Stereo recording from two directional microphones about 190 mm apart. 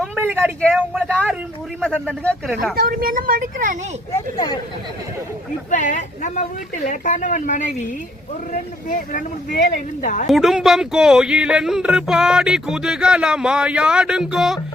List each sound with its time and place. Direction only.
0.6 s speech: 5° right (ahead or behind)
2.7 s a woman's voice: 50° right (ahead or behind)
4.1 s speech: 25° left (ahead or behind)
5.7 s a woman's voice: 40° left (ahead or behind)
10.2 s speech: centre (ahead or behind)